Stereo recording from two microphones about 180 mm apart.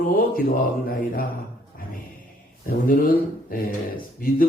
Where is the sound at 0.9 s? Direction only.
55° left (ahead or behind).